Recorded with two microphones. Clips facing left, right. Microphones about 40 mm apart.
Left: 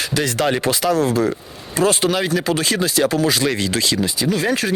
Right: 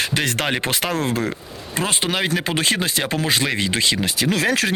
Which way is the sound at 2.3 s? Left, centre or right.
Right.